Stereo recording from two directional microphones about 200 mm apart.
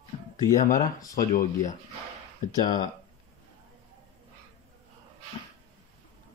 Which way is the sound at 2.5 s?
20° left (ahead or behind).